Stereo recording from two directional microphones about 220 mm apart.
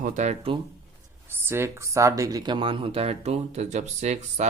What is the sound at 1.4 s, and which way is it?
Speech, 10° right (ahead or behind).